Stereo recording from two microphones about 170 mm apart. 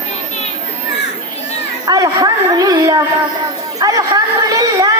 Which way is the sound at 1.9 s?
20° right (ahead or behind).